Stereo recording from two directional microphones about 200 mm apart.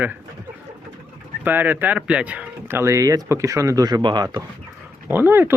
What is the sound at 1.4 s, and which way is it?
Speech, 10° right (ahead or behind).